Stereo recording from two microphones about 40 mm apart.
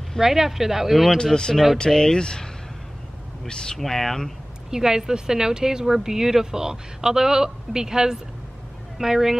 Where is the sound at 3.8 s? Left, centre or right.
Centre.